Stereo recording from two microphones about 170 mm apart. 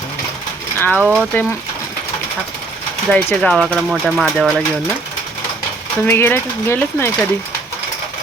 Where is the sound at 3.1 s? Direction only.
5° left (ahead or behind).